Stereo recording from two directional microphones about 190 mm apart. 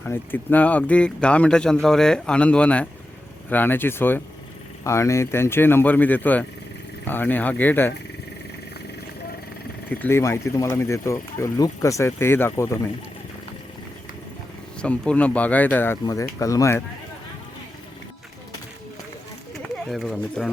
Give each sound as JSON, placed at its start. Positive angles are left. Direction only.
{"t": 0.0, "sound": "a man's voice", "side_deg": 10}
{"t": 9.9, "sound": "speech", "side_deg": 10}
{"t": 14.8, "sound": "speech", "side_deg": 5}
{"t": 19.9, "sound": "a man's voice", "side_deg": 5}